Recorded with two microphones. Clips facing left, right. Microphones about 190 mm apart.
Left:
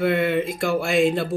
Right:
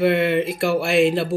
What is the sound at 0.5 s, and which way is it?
Speech, 5° right (ahead or behind).